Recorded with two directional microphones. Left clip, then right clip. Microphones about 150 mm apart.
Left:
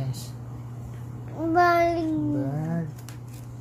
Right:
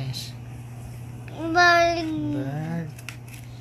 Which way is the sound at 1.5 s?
40° left (ahead or behind).